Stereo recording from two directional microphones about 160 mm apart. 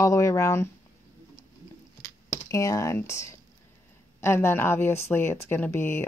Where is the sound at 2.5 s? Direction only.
20° left (ahead or behind).